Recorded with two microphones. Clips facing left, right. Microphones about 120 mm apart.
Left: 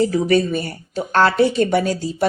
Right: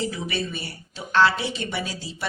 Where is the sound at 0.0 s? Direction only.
45° left (ahead or behind).